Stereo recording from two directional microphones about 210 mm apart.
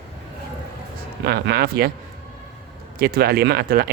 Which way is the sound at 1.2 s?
50° right (ahead or behind).